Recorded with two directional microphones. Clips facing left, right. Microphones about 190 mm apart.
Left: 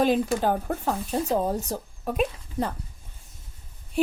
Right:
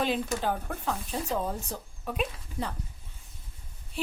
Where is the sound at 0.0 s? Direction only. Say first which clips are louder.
Left 7 dB; 45° left (ahead or behind).